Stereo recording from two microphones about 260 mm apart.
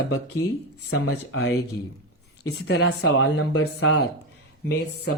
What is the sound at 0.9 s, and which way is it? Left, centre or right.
Speech, left.